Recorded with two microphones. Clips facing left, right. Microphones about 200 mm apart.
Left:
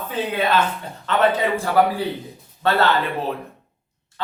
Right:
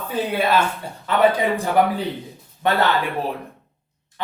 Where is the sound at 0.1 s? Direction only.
10° right (ahead or behind).